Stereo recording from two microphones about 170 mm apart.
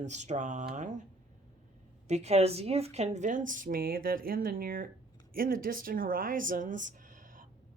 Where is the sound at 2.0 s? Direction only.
40° right (ahead or behind).